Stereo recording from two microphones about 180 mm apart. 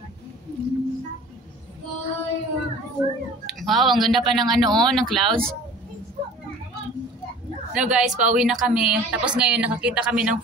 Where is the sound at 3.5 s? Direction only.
Centre (ahead or behind).